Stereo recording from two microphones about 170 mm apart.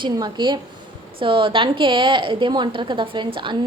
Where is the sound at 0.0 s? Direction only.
25° right (ahead or behind).